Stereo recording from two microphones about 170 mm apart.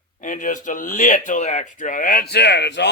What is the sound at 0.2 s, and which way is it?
Speech, 50° left (ahead or behind).